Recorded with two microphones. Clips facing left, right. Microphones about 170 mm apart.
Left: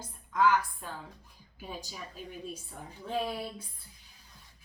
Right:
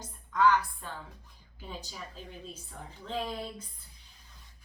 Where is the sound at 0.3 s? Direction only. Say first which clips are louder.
Right 1 dB; 10° left (ahead or behind).